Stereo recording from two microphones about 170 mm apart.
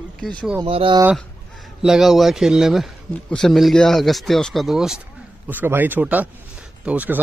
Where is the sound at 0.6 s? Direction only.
30° right (ahead or behind).